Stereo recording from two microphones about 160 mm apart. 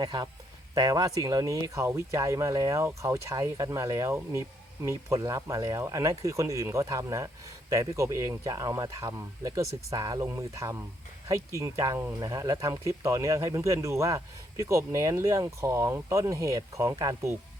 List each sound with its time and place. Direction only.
0.0 s speech: 25° right (ahead or behind)